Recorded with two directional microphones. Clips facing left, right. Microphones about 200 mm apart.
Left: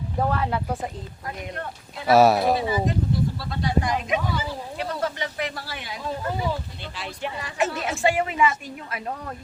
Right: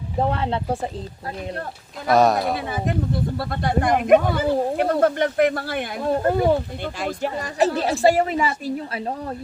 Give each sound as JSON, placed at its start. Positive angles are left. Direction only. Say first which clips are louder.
{"t": 0.2, "sound": "speech", "louder": "right 2 dB", "side_deg": -25}
{"t": 2.0, "sound": "speech", "louder": "left 1 dB", "side_deg": 5}
{"t": 2.6, "sound": "speech", "louder": "left 1 dB", "side_deg": -55}